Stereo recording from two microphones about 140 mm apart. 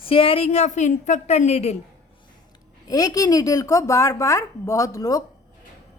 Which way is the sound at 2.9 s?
25° left (ahead or behind).